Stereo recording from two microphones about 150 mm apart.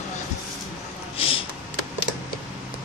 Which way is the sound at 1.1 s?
35° left (ahead or behind).